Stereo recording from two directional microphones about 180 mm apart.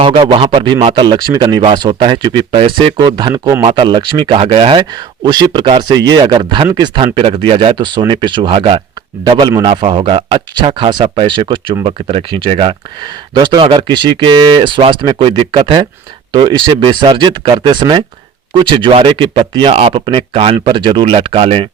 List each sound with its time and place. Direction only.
0.0 s speech: 35° right (ahead or behind)